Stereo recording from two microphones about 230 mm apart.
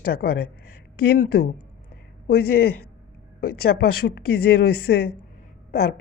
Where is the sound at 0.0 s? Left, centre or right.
Left.